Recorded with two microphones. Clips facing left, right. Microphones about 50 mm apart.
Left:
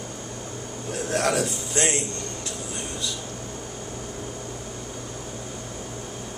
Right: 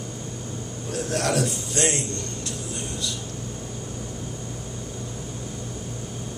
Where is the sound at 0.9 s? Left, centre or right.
Centre.